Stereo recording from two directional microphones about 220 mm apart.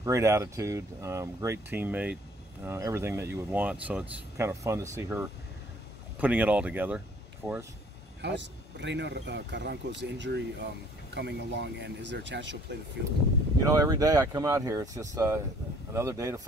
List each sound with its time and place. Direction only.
0.0 s speech: 15° right (ahead or behind)
8.2 s speech: 55° right (ahead or behind)
13.7 s speech: 15° right (ahead or behind)